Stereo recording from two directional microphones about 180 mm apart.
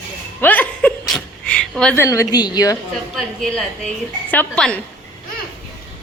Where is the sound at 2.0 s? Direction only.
15° left (ahead or behind).